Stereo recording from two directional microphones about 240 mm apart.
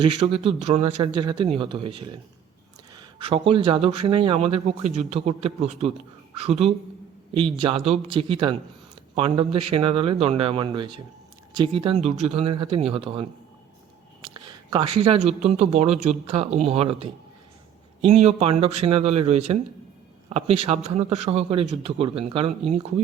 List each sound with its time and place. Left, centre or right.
0.0 s speech: right
14.3 s speech: centre